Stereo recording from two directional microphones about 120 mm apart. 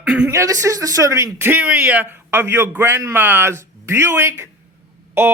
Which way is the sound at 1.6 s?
5° right (ahead or behind).